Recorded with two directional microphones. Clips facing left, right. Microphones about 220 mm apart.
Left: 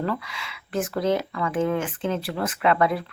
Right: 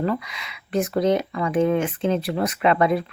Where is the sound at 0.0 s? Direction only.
20° right (ahead or behind).